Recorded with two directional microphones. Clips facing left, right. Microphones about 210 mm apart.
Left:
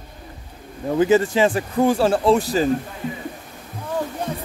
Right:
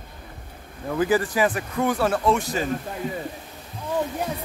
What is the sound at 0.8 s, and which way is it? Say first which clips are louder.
Speech: left 5 dB; 25° left (ahead or behind).